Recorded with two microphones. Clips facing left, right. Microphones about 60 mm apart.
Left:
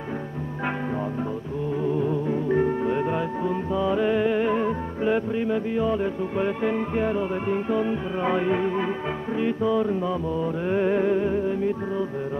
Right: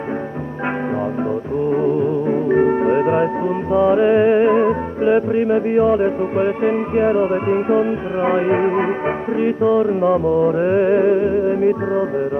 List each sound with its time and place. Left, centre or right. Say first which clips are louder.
1.7 s music: right 7 dB; right
8.5 s music: right 8 dB; right
9.4 s music: right 7 dB; right
10.0 s music: right 11 dB; right